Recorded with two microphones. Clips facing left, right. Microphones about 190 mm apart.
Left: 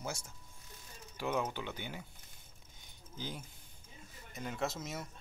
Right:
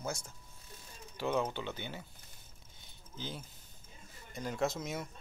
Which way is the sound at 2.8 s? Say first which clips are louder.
Even; 10° left (ahead or behind).